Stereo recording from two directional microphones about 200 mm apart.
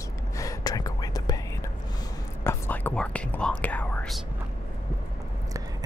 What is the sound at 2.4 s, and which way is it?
Whispering, 10° left (ahead or behind).